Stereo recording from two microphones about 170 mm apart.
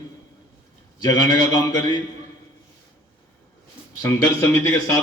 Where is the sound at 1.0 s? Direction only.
25° left (ahead or behind).